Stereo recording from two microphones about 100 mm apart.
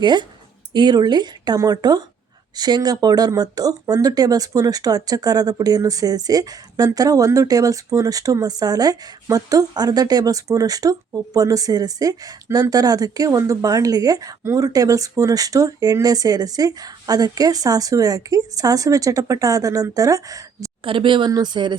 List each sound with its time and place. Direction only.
0.0 s speech: 50° right (ahead or behind)
20.8 s speech: 60° right (ahead or behind)
21.2 s speech: 45° right (ahead or behind)